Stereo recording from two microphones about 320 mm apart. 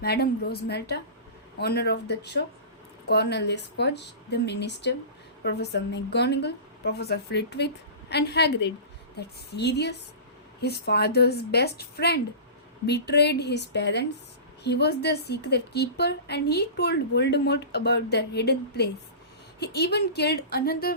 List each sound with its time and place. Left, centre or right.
0.0 s a woman's voice: left